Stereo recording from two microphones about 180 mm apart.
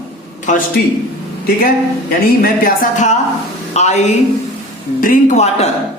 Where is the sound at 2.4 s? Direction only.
50° left (ahead or behind).